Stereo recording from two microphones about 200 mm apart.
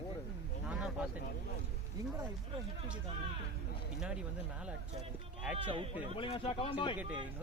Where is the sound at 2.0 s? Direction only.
20° right (ahead or behind).